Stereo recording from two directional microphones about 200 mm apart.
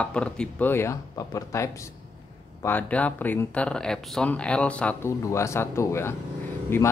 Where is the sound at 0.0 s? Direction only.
5° left (ahead or behind).